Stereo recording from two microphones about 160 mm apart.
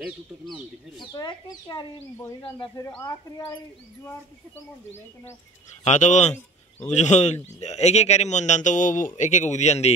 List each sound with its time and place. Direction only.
0.0 s speech: centre (ahead or behind)
1.0 s speech: 25° left (ahead or behind)
5.9 s a man's voice: 50° left (ahead or behind)